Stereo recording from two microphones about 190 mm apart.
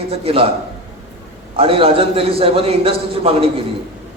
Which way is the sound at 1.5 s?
30° right (ahead or behind).